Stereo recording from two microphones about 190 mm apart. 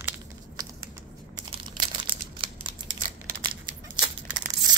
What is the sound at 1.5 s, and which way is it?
Crumpling, 25° right (ahead or behind).